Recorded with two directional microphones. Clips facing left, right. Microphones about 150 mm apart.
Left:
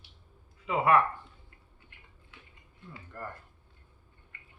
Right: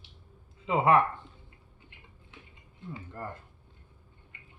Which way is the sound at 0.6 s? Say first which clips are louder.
Right 2 dB; 25° right (ahead or behind).